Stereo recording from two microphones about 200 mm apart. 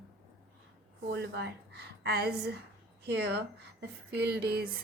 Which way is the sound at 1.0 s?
55° right (ahead or behind).